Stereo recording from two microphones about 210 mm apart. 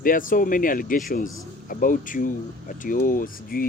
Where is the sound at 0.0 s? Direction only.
40° left (ahead or behind).